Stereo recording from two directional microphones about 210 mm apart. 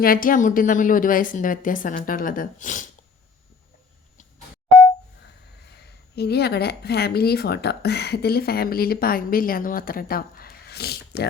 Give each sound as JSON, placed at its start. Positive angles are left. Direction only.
{"t": 0.0, "sound": "a woman's voice", "side_deg": 40}
{"t": 5.7, "sound": "speech", "side_deg": 50}